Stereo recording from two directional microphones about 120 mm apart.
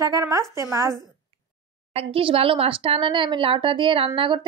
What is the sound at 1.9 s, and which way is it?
Speech, 50° right (ahead or behind).